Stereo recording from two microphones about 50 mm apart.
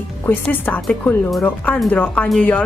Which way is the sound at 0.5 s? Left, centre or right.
Left.